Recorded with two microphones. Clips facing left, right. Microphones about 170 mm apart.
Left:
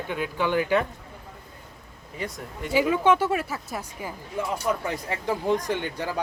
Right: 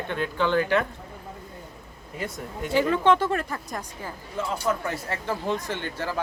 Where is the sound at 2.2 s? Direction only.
Centre (ahead or behind).